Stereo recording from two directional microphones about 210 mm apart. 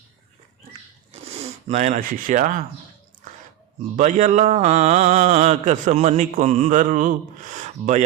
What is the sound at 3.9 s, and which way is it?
Mantra, 35° right (ahead or behind).